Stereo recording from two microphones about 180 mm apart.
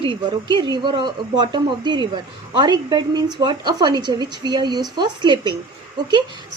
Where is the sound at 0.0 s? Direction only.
25° right (ahead or behind).